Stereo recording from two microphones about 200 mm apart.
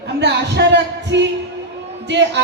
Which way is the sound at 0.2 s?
55° right (ahead or behind).